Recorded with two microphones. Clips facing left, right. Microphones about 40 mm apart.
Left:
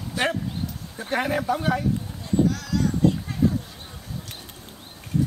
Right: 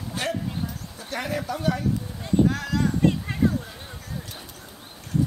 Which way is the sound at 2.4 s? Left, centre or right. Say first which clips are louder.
Even; right.